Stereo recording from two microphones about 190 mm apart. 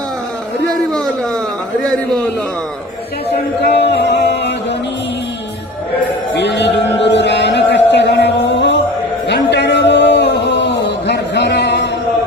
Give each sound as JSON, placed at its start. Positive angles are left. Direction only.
{"t": 3.6, "sound": "music", "side_deg": 60}
{"t": 6.3, "sound": "music", "side_deg": 65}
{"t": 9.2, "sound": "a sound", "side_deg": 65}